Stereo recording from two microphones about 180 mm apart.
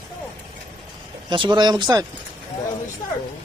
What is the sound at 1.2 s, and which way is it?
Speech, 25° right (ahead or behind).